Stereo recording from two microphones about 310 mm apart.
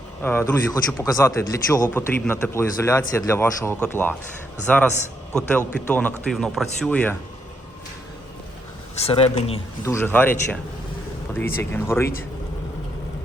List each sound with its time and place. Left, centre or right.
0.2 s a man's voice: centre
9.0 s speech: centre
9.9 s a man's voice: centre